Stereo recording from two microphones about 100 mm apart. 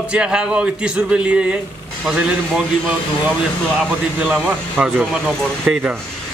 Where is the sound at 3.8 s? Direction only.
10° right (ahead or behind).